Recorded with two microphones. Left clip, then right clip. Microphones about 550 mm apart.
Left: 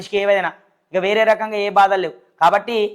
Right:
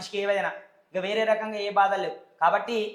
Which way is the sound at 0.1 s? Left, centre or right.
Left.